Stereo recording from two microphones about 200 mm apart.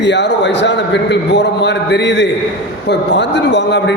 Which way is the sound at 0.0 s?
60° left (ahead or behind).